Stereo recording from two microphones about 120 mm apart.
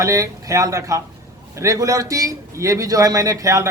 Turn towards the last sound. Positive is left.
turn(degrees=-25)  # may be behind; listen again after turning